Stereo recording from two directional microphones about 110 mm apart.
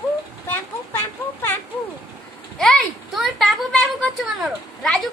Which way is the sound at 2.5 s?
5° left (ahead or behind).